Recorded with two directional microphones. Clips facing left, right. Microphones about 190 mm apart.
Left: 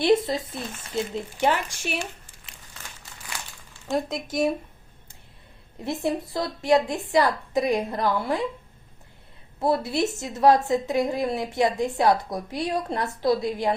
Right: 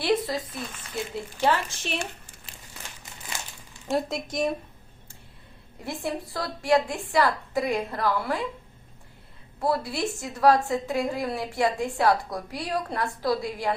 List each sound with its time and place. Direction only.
0.0 s a woman's voice: 25° left (ahead or behind)
3.8 s a woman's voice: centre (ahead or behind)
5.8 s a woman's voice: 20° left (ahead or behind)
9.6 s a woman's voice: 25° left (ahead or behind)